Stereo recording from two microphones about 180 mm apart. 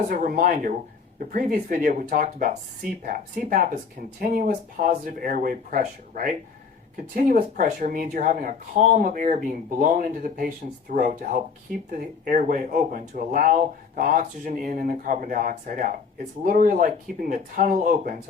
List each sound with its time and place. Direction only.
0.1 s speech: 50° right (ahead or behind)